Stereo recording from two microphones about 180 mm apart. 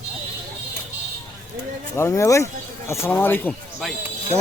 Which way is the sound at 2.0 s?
15° left (ahead or behind).